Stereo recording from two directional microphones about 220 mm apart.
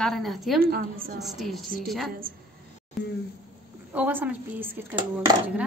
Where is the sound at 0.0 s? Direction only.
Centre (ahead or behind).